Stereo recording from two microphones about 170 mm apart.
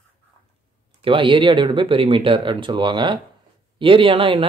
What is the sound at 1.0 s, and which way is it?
Speech, 30° right (ahead or behind).